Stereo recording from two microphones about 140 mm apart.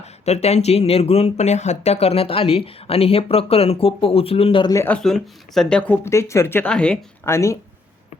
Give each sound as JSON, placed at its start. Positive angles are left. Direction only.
{"t": 0.0, "sound": "speech", "side_deg": 50}
{"t": 4.7, "sound": "speech", "side_deg": 20}
{"t": 4.9, "sound": "speech", "side_deg": 0}
{"t": 7.3, "sound": "speech", "side_deg": 20}